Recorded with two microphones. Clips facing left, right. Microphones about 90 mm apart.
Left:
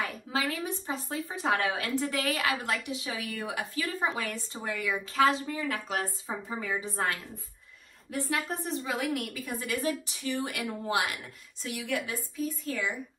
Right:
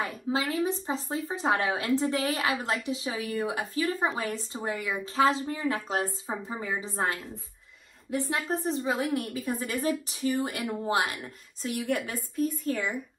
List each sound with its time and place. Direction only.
0.0 s a woman's voice: 30° right (ahead or behind); by 12.9 s 50° right (ahead or behind)